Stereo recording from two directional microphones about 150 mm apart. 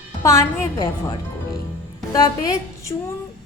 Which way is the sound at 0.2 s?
20° left (ahead or behind).